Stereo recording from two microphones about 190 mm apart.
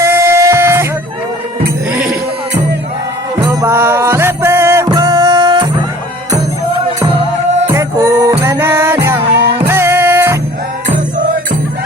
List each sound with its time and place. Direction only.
0.0 s music: 15° right (ahead or behind)
1.9 s music: 5° right (ahead or behind)
3.4 s music: 20° right (ahead or behind)
7.7 s music: 15° right (ahead or behind)